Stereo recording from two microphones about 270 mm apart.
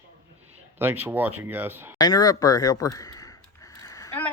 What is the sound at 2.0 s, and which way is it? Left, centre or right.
Speech, centre.